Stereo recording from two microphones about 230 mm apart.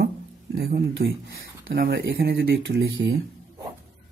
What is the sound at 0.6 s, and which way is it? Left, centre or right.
Speech, right.